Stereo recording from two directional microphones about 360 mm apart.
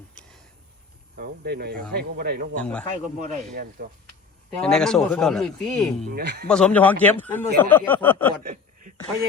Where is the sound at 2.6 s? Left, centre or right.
Centre.